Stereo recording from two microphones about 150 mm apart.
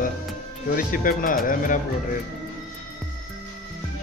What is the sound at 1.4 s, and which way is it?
Speech, 65° left (ahead or behind).